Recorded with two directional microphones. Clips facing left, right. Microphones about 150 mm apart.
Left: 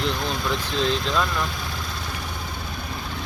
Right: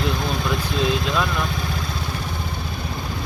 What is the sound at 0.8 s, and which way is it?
Speech, 10° right (ahead or behind).